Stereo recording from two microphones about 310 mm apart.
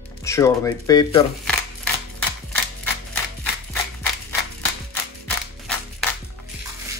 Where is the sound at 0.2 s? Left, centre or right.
Centre.